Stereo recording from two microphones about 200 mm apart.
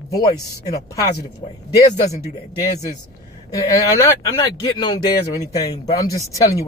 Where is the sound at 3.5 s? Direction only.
15° left (ahead or behind).